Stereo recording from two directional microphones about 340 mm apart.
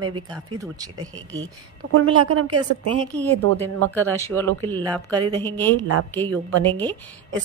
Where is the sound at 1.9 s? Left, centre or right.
Right.